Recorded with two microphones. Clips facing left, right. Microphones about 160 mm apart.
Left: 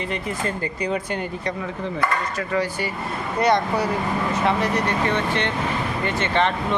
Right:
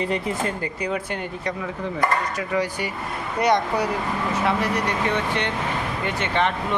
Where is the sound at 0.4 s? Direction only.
10° right (ahead or behind).